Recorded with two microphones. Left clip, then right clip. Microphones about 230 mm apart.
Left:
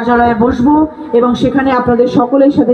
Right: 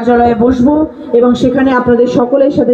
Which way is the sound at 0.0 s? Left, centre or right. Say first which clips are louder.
Right 1 dB; left.